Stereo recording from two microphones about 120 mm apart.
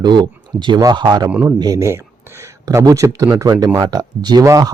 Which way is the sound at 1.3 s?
10° right (ahead or behind).